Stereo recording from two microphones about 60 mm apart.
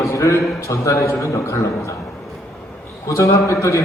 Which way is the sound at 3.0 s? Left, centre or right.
Left.